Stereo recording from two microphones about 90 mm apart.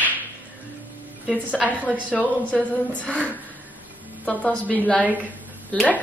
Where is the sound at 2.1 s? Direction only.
15° left (ahead or behind).